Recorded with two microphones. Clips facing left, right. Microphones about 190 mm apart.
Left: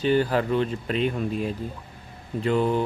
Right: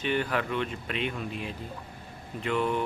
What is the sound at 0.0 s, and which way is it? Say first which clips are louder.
Speech: left 7 dB; 35° left (ahead or behind).